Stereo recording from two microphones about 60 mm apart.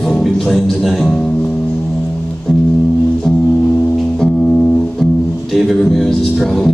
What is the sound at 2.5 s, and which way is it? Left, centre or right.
Music, centre.